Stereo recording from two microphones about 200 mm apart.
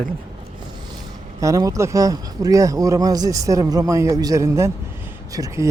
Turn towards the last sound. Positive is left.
turn(degrees=-15)  # may be behind; listen again after turning